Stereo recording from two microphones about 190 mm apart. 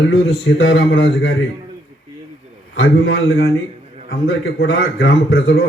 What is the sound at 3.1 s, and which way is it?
Speech, 70° left (ahead or behind).